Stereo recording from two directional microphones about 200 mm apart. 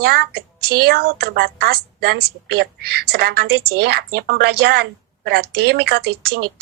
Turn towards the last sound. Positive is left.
turn(degrees=-55)  # may be behind; listen again after turning